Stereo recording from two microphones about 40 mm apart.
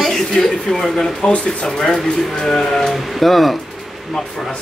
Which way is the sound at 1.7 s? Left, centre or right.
Centre.